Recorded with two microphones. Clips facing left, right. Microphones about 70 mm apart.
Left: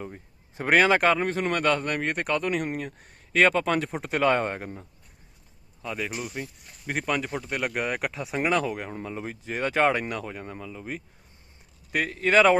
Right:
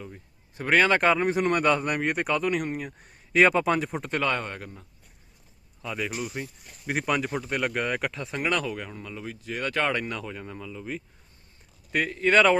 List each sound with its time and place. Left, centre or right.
0.1 s a sound: left
0.7 s speech: centre
4.2 s speech: left
5.8 s speech: centre
8.9 s speech: left
11.9 s speech: centre